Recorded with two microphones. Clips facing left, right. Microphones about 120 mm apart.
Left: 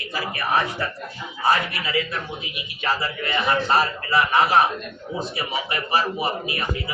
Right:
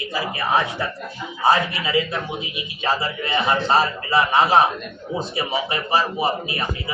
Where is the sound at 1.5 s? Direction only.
25° right (ahead or behind).